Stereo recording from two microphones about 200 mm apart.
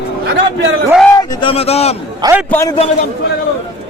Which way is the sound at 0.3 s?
60° right (ahead or behind).